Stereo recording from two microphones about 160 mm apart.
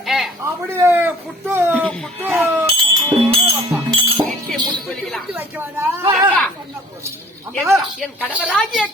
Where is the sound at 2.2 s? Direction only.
15° right (ahead or behind).